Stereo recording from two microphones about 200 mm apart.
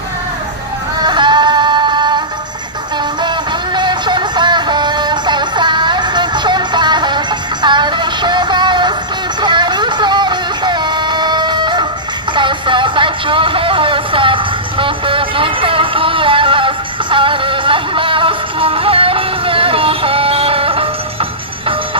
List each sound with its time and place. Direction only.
1.0 s music: 25° right (ahead or behind)
9.4 s vehicle: 20° right (ahead or behind)
12.4 s a sound: 25° right (ahead or behind)